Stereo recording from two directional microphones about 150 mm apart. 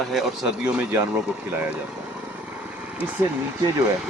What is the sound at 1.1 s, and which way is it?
Vehicle, 5° right (ahead or behind).